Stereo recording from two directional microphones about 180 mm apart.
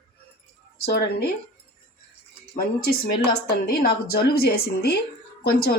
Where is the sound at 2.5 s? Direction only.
60° left (ahead or behind).